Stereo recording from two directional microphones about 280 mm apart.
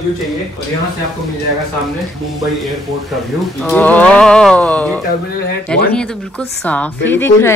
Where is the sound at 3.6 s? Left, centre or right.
Centre.